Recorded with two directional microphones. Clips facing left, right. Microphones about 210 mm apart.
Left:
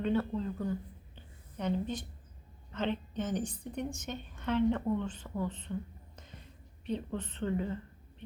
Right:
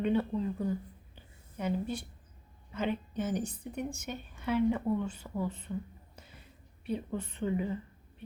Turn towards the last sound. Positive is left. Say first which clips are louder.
# right 1 dB
turn(degrees=-10)  # may be behind; listen again after turning